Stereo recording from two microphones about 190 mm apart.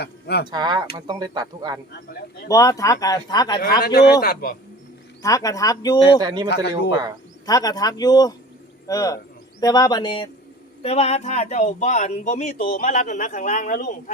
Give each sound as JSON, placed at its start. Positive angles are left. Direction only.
{"t": 0.0, "sound": "speech", "side_deg": 60}
{"t": 0.5, "sound": "speech", "side_deg": -25}
{"t": 2.5, "sound": "speech", "side_deg": 15}
{"t": 3.8, "sound": "speech", "side_deg": 55}
{"t": 5.2, "sound": "speech", "side_deg": 20}
{"t": 6.2, "sound": "speech", "side_deg": -20}
{"t": 6.5, "sound": "a man's voice", "side_deg": 60}
{"t": 7.4, "sound": "speech", "side_deg": 20}